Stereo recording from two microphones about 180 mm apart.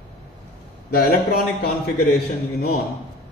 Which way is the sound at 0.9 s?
55° left (ahead or behind).